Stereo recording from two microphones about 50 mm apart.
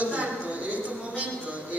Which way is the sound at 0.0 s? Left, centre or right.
Right.